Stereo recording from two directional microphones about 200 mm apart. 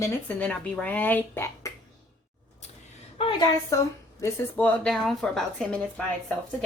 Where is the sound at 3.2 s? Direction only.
25° left (ahead or behind).